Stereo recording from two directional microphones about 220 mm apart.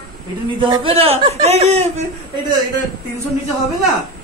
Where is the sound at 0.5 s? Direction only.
20° right (ahead or behind).